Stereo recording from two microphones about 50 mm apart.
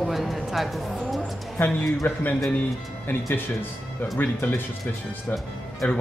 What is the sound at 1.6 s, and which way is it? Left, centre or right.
Speech, left.